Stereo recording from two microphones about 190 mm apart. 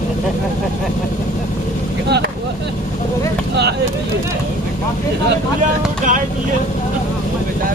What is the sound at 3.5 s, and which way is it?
Speech, 60° right (ahead or behind).